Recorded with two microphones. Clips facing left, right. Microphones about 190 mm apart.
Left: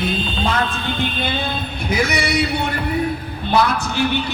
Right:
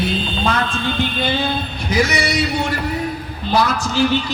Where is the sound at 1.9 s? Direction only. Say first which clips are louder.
Right 1 dB; 55° left (ahead or behind).